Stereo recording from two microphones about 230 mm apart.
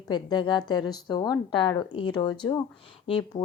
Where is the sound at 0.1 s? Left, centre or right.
Centre.